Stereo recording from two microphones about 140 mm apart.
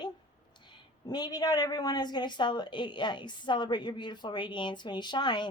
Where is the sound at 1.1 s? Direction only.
30° left (ahead or behind).